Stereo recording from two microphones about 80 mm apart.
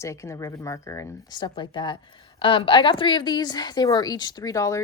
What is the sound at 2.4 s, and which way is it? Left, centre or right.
A woman's voice, left.